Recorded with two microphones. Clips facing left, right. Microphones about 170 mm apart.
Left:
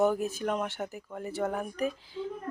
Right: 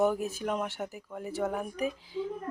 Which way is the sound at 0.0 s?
5° right (ahead or behind).